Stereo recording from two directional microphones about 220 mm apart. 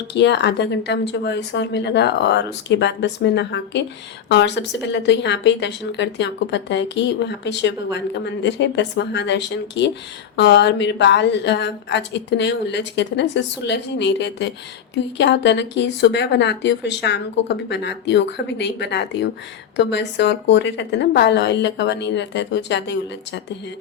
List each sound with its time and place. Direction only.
0.1 s speech: 50° left (ahead or behind)